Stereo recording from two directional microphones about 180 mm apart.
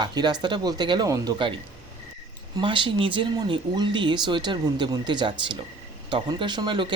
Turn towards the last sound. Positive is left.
turn(degrees=-25)  # may be behind; listen again after turning